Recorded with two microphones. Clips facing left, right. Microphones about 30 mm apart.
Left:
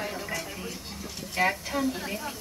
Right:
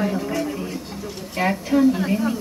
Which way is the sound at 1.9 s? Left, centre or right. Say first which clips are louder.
Right 12 dB; centre.